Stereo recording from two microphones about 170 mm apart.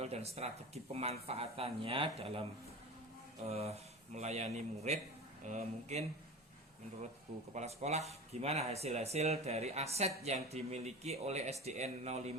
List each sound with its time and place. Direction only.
0.0 s speech: 40° right (ahead or behind)
7.5 s speech: 40° right (ahead or behind)